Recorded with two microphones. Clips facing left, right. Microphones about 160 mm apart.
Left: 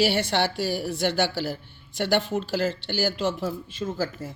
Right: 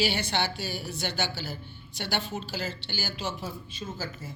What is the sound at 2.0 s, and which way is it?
Speech, 60° left (ahead or behind).